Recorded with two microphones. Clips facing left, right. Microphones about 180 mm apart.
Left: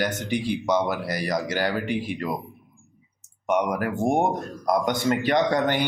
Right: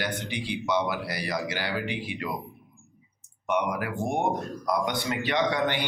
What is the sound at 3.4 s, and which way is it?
Speech, 45° left (ahead or behind).